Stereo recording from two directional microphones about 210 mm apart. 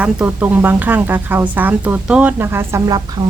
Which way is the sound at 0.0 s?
5° right (ahead or behind).